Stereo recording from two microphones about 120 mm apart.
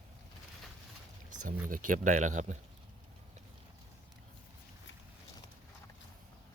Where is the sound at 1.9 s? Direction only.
90° right.